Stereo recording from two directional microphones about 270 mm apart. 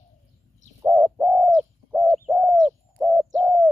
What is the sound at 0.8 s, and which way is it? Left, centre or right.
Bird, centre.